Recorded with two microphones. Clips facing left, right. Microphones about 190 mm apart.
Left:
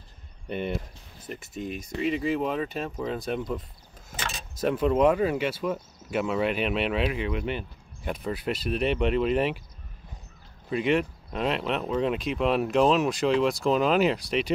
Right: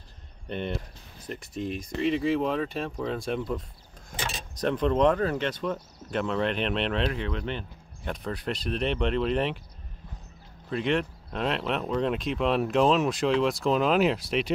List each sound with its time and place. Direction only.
0.5 s speech: 5° left (ahead or behind)
10.7 s speech: 5° left (ahead or behind)